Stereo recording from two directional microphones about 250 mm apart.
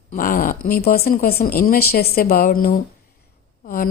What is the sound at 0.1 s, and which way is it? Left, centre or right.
A woman's voice, left.